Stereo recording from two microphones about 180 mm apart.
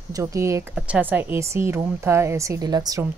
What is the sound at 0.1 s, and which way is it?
Speech, 15° right (ahead or behind).